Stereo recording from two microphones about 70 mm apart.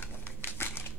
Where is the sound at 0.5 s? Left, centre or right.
Left.